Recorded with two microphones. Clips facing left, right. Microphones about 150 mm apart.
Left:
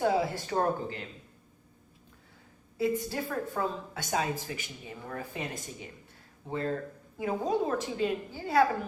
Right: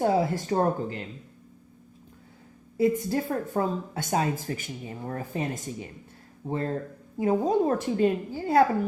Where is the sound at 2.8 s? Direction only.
50° right (ahead or behind).